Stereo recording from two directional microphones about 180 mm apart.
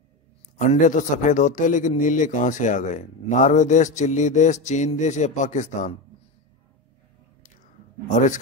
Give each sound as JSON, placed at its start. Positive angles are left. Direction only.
{"t": 0.6, "sound": "a man's voice", "side_deg": 40}
{"t": 8.1, "sound": "a man's voice", "side_deg": 45}